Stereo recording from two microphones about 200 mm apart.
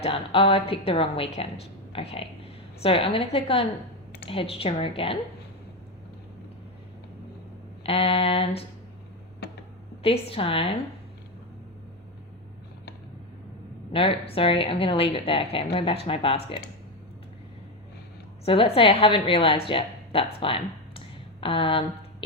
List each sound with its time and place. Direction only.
0.0 s a woman's voice: 25° left (ahead or behind)
7.9 s a woman's voice: 30° left (ahead or behind)
10.0 s a woman's voice: 30° left (ahead or behind)
13.9 s a woman's voice: 25° left (ahead or behind)
18.4 s a woman's voice: 30° left (ahead or behind)